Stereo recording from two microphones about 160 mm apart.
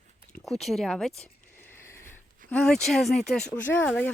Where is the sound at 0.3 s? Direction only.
Centre (ahead or behind).